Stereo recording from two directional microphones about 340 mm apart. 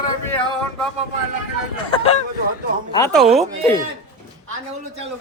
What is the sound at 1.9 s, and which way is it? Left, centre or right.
Speech, centre.